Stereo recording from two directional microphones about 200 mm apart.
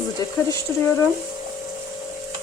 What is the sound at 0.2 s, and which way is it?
Speech, 15° left (ahead or behind).